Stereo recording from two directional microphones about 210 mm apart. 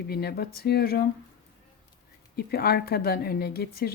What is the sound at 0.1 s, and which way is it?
Speech, 50° left (ahead or behind).